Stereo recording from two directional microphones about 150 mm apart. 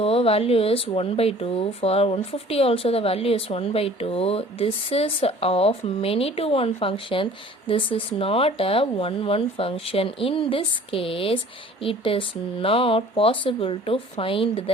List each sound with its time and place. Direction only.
0.0 s speech: 40° left (ahead or behind)